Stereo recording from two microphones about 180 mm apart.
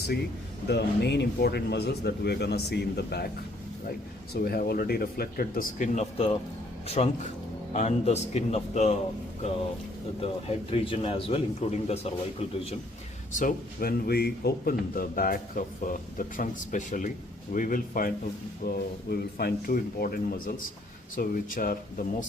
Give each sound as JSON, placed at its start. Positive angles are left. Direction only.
{"t": 0.7, "sound": "a man's voice", "side_deg": 70}
{"t": 4.4, "sound": "a man's voice", "side_deg": 60}
{"t": 10.7, "sound": "a man's voice", "side_deg": 30}
{"t": 13.3, "sound": "a man's voice", "side_deg": 50}